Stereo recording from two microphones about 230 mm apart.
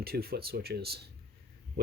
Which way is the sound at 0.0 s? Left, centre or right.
Right.